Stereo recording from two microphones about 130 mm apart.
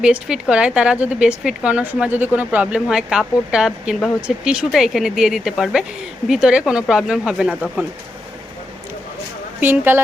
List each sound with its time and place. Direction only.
0.0 s speech: 5° right (ahead or behind)
9.6 s speech: 15° right (ahead or behind)